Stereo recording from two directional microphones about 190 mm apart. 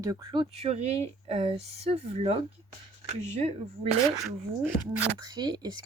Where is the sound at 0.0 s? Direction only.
15° right (ahead or behind).